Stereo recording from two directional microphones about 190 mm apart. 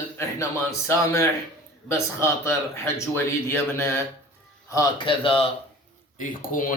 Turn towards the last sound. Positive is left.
turn(degrees=45)  # may be behind; listen again after turning